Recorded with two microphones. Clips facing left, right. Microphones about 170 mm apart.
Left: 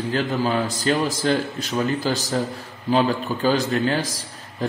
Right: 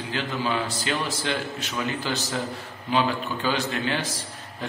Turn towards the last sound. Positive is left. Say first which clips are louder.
# left 6 dB
turn(degrees=40)  # may be behind; listen again after turning